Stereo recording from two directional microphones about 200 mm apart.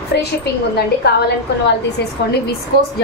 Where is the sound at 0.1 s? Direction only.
55° left (ahead or behind).